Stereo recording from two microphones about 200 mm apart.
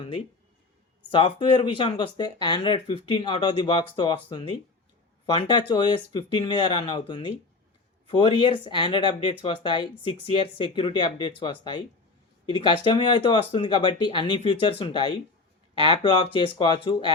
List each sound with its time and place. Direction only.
1.1 s speech: 25° left (ahead or behind)